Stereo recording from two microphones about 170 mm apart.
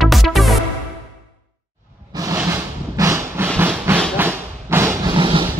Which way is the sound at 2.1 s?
15° right (ahead or behind).